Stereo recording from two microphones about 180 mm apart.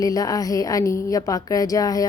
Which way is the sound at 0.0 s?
20° left (ahead or behind).